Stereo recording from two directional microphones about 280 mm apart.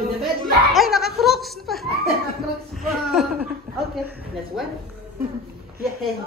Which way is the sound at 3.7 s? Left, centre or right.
Right.